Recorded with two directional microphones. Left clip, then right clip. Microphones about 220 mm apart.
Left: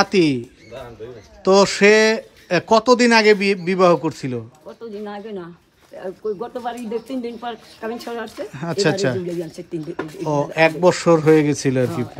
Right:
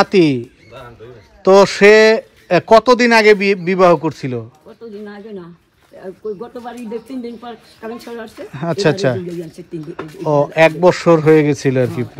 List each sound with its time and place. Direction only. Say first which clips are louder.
0.0 s speech: right 4 dB; 5° left (ahead or behind)
6.4 s speech: left 2 dB; 25° left (ahead or behind)
8.4 s speech: right 4 dB; 10° left (ahead or behind)
9.9 s speech: even; 45° left (ahead or behind)
10.2 s speech: right 5 dB; 10° left (ahead or behind)